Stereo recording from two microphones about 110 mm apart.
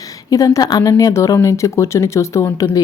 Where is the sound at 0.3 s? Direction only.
30° left (ahead or behind).